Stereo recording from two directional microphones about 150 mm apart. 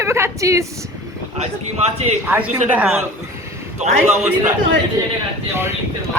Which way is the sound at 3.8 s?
50° right (ahead or behind).